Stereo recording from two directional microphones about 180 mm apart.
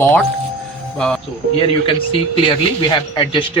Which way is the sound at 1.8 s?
30° left (ahead or behind).